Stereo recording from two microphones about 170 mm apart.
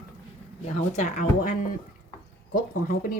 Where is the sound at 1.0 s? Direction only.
45° left (ahead or behind).